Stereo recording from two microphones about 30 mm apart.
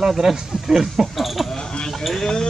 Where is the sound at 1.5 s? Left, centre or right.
Left.